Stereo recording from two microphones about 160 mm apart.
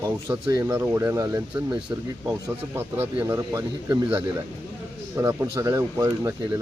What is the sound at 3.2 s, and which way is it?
Speech, 20° right (ahead or behind).